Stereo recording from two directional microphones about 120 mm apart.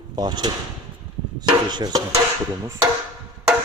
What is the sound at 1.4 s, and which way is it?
Chopping, 35° right (ahead or behind).